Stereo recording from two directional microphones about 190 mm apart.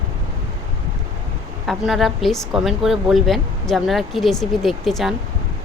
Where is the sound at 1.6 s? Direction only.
Centre (ahead or behind).